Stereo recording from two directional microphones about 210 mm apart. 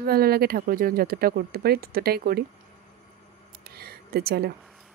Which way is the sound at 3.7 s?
50° right (ahead or behind).